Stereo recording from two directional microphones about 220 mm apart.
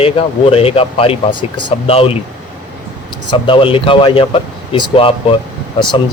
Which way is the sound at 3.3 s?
25° left (ahead or behind).